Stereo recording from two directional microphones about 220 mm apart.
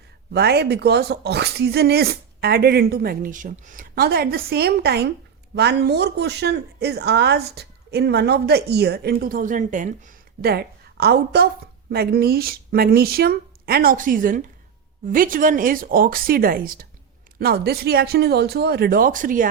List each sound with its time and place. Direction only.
0.3 s a woman's voice: 45° right (ahead or behind)